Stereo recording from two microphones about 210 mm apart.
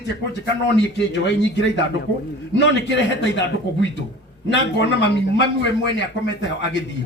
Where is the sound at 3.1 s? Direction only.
60° left (ahead or behind).